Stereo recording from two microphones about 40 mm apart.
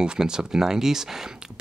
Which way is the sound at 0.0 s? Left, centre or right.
Centre.